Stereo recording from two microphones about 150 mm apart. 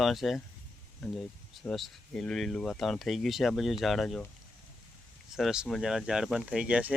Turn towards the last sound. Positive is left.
turn(degrees=-10)  # may be behind; listen again after turning